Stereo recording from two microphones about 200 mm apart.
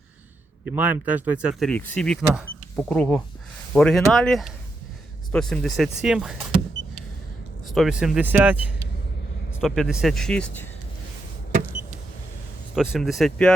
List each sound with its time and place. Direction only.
0.6 s speech: 10° right (ahead or behind)
7.7 s speech: centre (ahead or behind)
12.7 s speech: centre (ahead or behind)